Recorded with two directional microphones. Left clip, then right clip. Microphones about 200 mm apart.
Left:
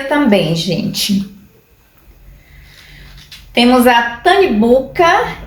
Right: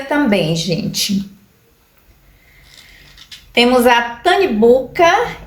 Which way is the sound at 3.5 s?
30° right (ahead or behind).